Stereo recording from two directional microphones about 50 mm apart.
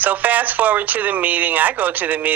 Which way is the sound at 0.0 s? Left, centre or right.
Right.